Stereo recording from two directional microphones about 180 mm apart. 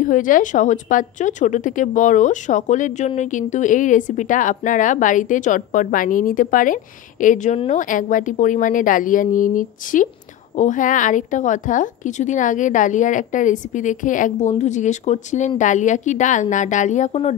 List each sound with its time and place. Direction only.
0.0 s a woman's voice: 50° left (ahead or behind)